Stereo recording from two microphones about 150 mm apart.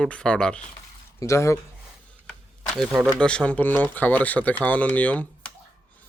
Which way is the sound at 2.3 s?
5° left (ahead or behind).